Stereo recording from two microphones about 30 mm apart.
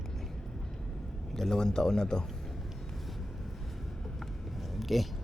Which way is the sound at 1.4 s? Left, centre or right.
Centre.